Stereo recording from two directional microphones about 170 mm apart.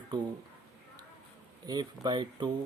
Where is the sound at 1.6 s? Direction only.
25° right (ahead or behind).